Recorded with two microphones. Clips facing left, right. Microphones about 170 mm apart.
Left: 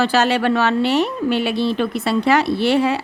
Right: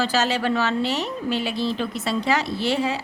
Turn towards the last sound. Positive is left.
turn(degrees=65)  # may be behind; listen again after turning